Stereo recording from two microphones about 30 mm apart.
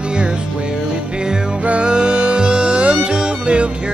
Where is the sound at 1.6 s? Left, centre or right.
Right.